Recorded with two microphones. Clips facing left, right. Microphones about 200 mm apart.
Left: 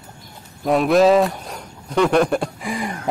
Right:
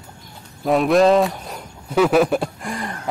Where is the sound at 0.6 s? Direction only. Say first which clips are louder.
Even; centre (ahead or behind).